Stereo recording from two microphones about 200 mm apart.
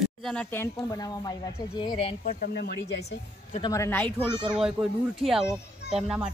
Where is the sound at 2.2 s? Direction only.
45° left (ahead or behind).